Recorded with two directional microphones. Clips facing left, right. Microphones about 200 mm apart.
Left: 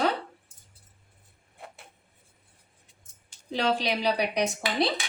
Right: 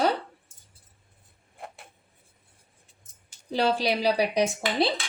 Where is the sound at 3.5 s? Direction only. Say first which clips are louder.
Right 2 dB; 35° right (ahead or behind).